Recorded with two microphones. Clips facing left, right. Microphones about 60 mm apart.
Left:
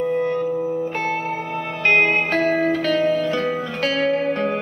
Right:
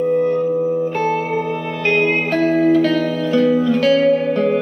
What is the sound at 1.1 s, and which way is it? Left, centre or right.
Music, right.